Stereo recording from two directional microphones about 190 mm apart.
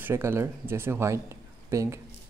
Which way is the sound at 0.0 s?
10° right (ahead or behind).